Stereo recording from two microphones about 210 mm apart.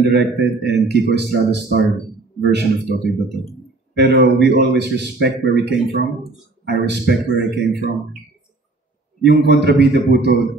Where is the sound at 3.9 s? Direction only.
50° right (ahead or behind).